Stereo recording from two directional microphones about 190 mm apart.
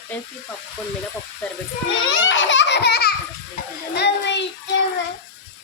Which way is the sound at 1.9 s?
90° left.